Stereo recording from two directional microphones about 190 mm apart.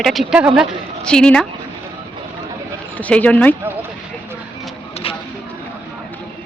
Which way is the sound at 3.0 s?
5° left (ahead or behind).